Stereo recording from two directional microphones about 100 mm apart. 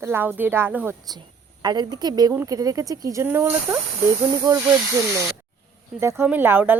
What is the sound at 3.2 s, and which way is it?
Speech, 25° right (ahead or behind).